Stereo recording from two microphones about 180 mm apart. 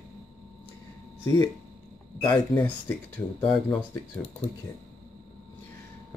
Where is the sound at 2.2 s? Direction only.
20° left (ahead or behind).